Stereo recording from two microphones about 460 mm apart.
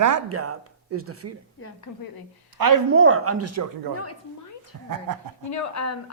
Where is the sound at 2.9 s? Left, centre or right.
Right.